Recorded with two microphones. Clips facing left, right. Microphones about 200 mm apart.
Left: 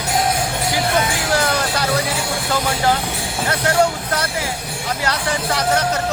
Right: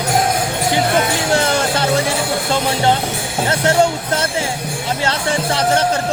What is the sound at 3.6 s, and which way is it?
Speech, 25° right (ahead or behind).